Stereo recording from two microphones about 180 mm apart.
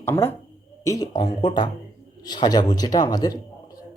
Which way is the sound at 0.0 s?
15° left (ahead or behind).